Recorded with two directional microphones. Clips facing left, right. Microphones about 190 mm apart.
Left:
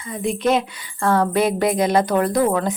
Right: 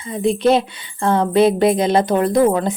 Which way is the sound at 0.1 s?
30° right (ahead or behind).